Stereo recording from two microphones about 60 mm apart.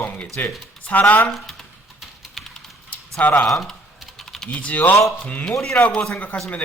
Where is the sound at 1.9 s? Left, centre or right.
Centre.